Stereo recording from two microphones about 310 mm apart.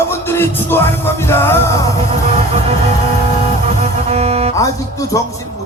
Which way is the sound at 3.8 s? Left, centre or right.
Centre.